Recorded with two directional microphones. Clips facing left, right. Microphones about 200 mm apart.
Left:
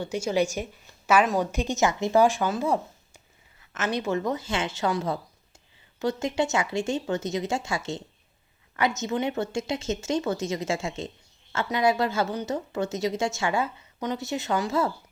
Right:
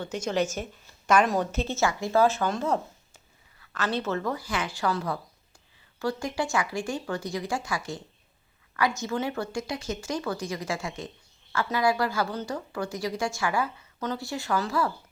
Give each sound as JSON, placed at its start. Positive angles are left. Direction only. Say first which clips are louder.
{"t": 0.0, "sound": "a woman's voice", "louder": "left 2 dB", "side_deg": 10}